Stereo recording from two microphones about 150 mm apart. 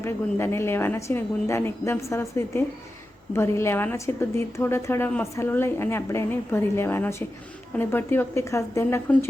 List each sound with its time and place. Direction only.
0.0 s a woman's voice: 15° left (ahead or behind)